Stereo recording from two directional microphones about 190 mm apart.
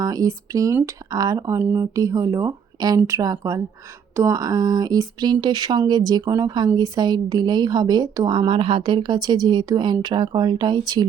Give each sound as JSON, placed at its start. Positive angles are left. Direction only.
{"t": 0.0, "sound": "speech", "side_deg": -20}